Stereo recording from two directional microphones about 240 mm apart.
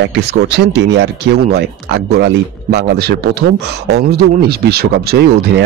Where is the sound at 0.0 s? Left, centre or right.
Right.